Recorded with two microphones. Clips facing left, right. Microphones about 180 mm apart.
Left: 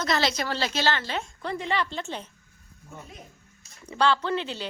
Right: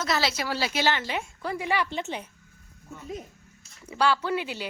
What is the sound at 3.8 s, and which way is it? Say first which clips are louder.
Speech: left 1 dB; 10° right (ahead or behind).